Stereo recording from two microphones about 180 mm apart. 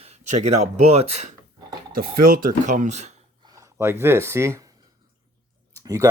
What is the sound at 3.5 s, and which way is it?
Speech, 15° right (ahead or behind).